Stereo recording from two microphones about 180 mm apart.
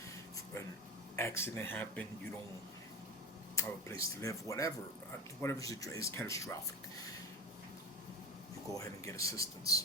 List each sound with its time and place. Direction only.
1.1 s speech: 15° left (ahead or behind)
3.5 s speech: 15° left (ahead or behind)
8.7 s speech: 15° left (ahead or behind)